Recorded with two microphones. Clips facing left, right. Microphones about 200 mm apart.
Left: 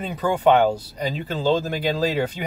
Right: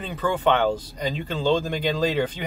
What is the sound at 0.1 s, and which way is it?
Speech, 10° left (ahead or behind).